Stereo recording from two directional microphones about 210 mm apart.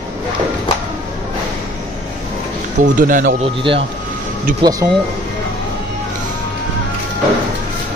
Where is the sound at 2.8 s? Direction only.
40° right (ahead or behind).